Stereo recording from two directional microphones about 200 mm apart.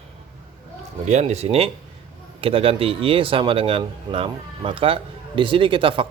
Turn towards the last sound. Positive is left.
turn(degrees=-25)  # may be behind; listen again after turning